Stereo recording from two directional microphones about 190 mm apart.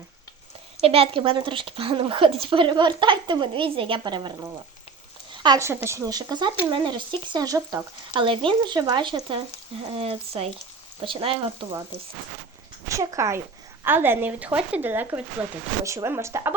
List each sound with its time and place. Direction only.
0.8 s speech: 30° right (ahead or behind)
12.9 s speech: 15° right (ahead or behind)